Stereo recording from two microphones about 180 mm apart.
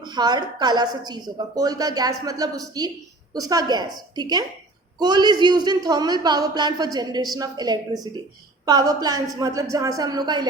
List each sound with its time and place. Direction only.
0.0 s a woman's voice: 25° right (ahead or behind)